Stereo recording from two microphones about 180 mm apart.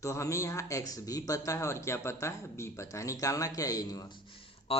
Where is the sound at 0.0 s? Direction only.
15° left (ahead or behind).